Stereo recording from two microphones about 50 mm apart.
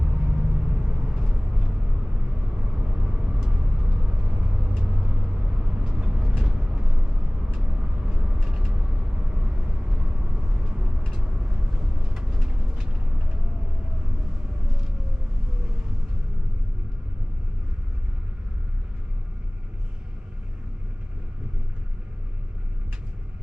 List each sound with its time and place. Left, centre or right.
0.0 s vehicle: centre